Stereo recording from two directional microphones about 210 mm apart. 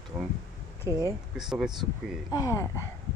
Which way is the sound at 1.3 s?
5° right (ahead or behind).